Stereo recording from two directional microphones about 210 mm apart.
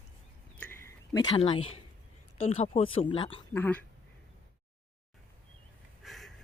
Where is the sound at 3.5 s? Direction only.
10° left (ahead or behind).